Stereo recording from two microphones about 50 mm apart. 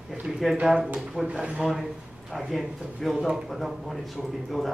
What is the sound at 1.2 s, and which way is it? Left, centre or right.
Speech, centre.